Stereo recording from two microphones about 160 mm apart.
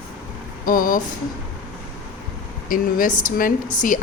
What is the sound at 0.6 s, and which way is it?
Speech, 60° left (ahead or behind).